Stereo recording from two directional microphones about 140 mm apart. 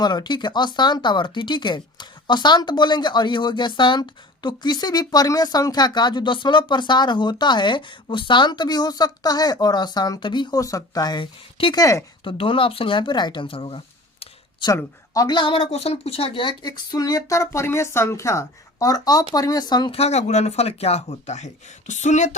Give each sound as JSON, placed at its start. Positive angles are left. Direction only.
{"t": 0.0, "sound": "speech", "side_deg": 30}
{"t": 11.8, "sound": "a woman's voice", "side_deg": 20}
{"t": 12.2, "sound": "speech", "side_deg": 40}
{"t": 14.7, "sound": "a woman's voice", "side_deg": 25}
{"t": 19.9, "sound": "speech", "side_deg": 50}